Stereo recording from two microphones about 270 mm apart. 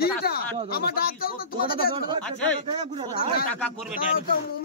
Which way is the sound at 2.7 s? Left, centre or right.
Right.